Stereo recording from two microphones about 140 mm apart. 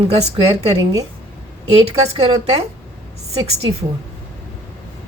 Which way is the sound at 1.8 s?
45° right (ahead or behind).